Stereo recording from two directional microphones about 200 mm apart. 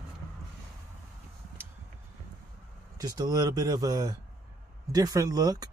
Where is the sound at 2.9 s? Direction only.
20° right (ahead or behind).